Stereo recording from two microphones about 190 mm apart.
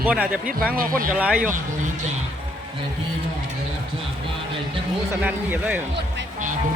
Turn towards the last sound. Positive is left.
turn(degrees=-10)  # may be behind; listen again after turning